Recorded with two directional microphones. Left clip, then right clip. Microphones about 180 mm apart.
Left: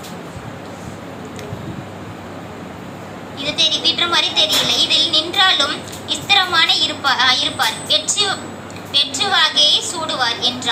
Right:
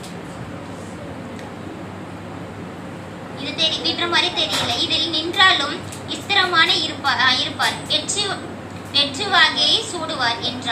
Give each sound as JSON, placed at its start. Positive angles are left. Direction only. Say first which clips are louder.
{"t": 3.4, "sound": "a woman's voice", "louder": "left 5 dB", "side_deg": 55}